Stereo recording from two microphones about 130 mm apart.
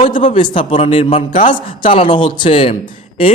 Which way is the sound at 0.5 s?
50° left (ahead or behind).